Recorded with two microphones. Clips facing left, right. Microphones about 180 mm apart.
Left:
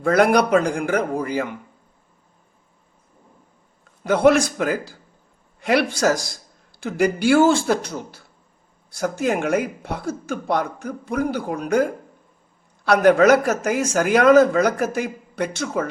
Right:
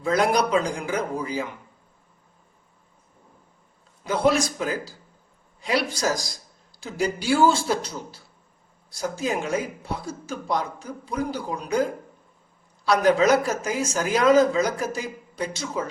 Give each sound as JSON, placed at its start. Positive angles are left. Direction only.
{"t": 0.0, "sound": "speech", "side_deg": 60}
{"t": 4.0, "sound": "speech", "side_deg": 60}
{"t": 6.8, "sound": "speech", "side_deg": 55}